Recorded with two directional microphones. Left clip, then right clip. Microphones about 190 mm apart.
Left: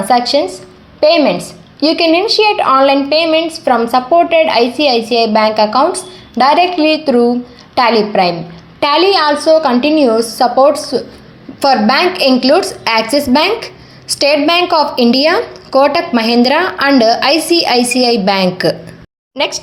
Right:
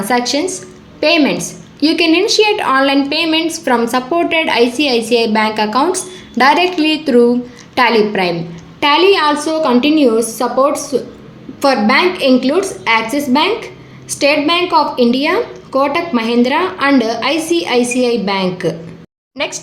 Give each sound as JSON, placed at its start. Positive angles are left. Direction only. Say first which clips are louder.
{"t": 0.0, "sound": "a woman's voice", "louder": "left 4 dB", "side_deg": 5}